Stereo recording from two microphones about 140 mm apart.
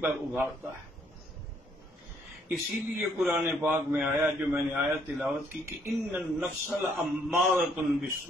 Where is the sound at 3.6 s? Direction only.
10° right (ahead or behind).